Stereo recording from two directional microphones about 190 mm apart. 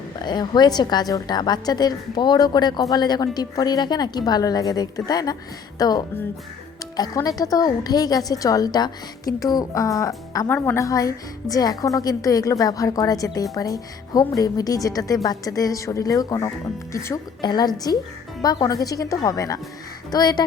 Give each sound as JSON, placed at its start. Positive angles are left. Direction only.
{"t": 0.3, "sound": "speech", "side_deg": 20}